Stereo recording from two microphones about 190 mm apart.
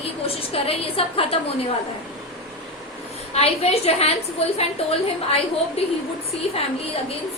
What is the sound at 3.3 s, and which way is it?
Speech, 35° left (ahead or behind).